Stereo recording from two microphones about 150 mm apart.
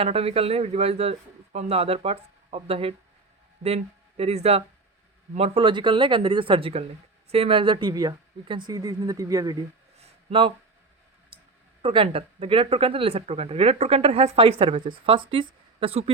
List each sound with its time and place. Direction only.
0.0 s speech: 40° right (ahead or behind); by 9.6 s 25° right (ahead or behind)
10.0 s a sound: 40° right (ahead or behind)
11.3 s clicking: 35° right (ahead or behind)
11.8 s speech: 40° right (ahead or behind)